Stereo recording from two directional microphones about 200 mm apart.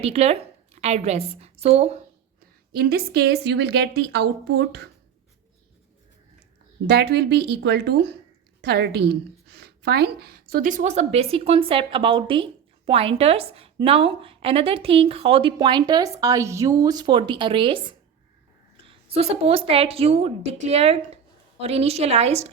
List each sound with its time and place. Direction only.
0.0 s a woman's voice: 30° right (ahead or behind)
2.7 s a woman's voice: 50° right (ahead or behind)
6.8 s a woman's voice: 55° right (ahead or behind); by 22.4 s 30° right (ahead or behind)